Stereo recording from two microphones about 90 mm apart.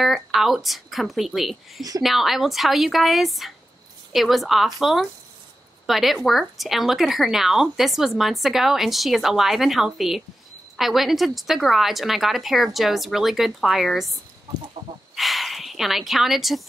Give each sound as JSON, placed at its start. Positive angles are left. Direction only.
{"t": 0.0, "sound": "a woman's voice", "side_deg": 0}
{"t": 14.8, "sound": "chicken", "side_deg": -60}
{"t": 15.1, "sound": "speech", "side_deg": 0}